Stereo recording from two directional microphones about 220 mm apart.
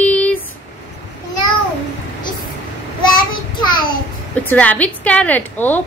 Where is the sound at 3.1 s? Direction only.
20° left (ahead or behind).